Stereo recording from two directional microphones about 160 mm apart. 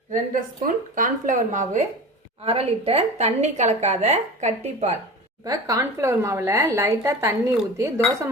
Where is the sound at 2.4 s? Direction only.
40° right (ahead or behind).